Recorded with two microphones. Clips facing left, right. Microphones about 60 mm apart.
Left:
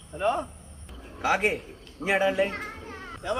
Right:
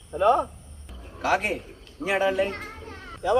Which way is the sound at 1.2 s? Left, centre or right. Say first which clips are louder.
Even; centre.